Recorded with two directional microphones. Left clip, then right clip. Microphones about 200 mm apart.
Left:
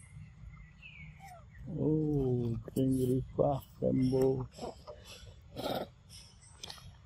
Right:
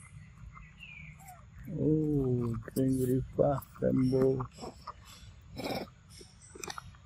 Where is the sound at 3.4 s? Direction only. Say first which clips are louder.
Right 2 dB; 5° right (ahead or behind).